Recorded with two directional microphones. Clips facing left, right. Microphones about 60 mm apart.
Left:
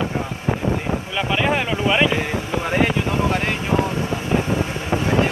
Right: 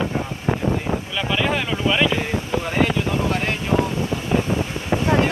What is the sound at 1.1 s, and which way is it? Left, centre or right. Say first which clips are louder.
Speech: left 3 dB; centre.